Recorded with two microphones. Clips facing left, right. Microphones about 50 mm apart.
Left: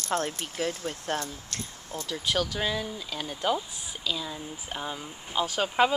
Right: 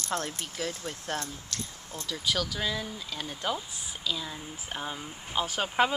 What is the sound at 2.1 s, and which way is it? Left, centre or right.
Speech, centre.